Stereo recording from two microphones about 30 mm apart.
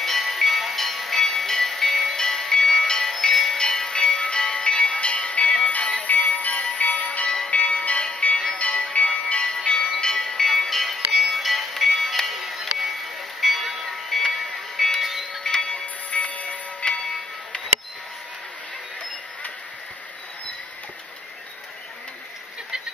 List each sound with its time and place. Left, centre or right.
0.0 s music: centre
3.5 s music: left
4.1 s music: left; by 12.9 s centre
13.4 s a sound: centre
15.0 s music: centre
15.4 s wind chime: left
15.8 s a sound: left
16.8 s music: left